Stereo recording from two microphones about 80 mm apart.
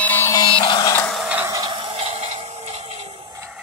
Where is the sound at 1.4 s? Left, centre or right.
Right.